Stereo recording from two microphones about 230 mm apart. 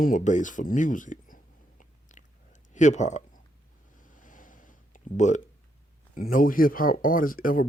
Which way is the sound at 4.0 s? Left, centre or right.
Left.